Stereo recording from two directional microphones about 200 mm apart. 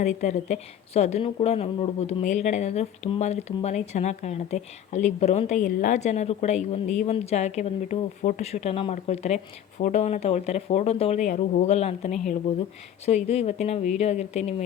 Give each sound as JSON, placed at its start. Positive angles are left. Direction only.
{"t": 0.0, "sound": "a woman's voice", "side_deg": 35}